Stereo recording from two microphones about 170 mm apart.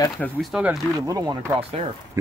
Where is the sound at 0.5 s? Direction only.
5° right (ahead or behind).